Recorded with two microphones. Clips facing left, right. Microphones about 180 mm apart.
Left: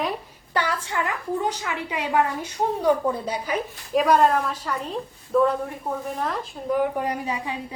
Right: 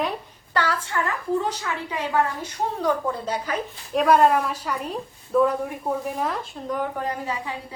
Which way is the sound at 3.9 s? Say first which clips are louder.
Right 1 dB; 5° right (ahead or behind).